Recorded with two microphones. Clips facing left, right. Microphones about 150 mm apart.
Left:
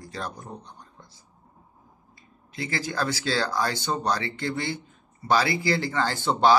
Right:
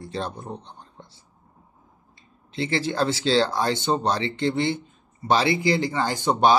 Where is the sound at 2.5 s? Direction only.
25° right (ahead or behind).